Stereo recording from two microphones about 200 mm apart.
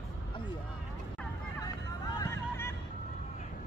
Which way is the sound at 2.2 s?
10° left (ahead or behind).